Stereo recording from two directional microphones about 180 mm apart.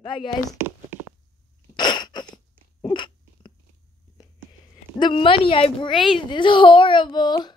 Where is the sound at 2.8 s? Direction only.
25° left (ahead or behind).